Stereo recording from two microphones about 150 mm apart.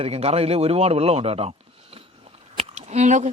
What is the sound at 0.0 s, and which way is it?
A man's voice, 45° right (ahead or behind).